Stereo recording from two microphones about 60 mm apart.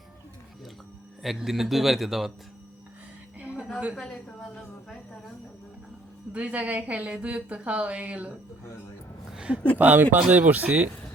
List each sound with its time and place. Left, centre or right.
1.2 s a man's voice: centre
3.3 s music: right
3.9 s a woman's voice: centre
6.3 s speech: right
9.3 s a sound: centre
9.7 s speech: right